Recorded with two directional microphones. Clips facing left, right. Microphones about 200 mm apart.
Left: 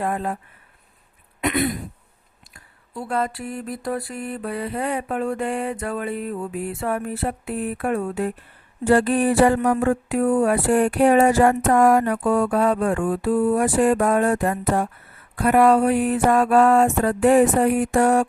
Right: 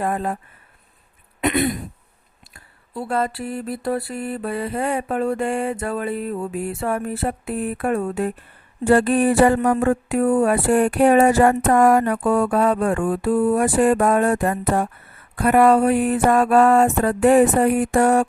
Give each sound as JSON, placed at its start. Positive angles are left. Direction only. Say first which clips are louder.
{"t": 0.0, "sound": "mantra", "louder": "right 2 dB", "side_deg": -40}
{"t": 1.4, "sound": "throat clearing", "louder": "right 2 dB", "side_deg": -25}
{"t": 3.1, "sound": "mantra", "louder": "right 2 dB", "side_deg": -35}
{"t": 8.9, "sound": "a sound", "louder": "right 2 dB", "side_deg": -50}